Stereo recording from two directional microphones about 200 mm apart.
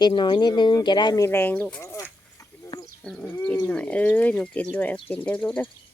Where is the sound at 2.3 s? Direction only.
20° left (ahead or behind).